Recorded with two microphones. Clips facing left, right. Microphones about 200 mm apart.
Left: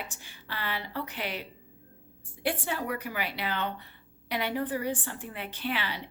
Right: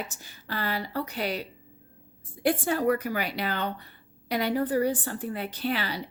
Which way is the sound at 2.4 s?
45° right (ahead or behind).